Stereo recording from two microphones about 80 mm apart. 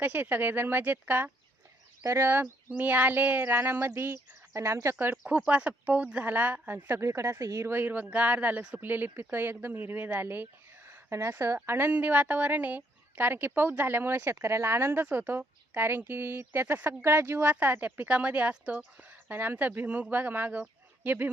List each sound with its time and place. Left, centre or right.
0.0 s speech: right
5.5 s speech: centre; by 7.7 s right
7.7 s speech: right